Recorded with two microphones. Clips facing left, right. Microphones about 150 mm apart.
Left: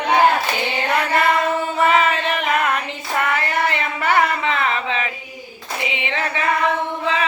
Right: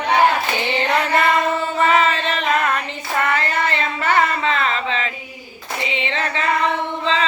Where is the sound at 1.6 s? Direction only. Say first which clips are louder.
Even; 15° left (ahead or behind).